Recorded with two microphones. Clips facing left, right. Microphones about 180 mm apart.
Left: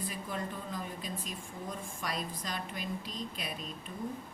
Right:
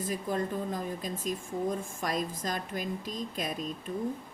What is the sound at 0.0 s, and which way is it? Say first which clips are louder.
A woman's voice: right 7 dB; 45° right (ahead or behind).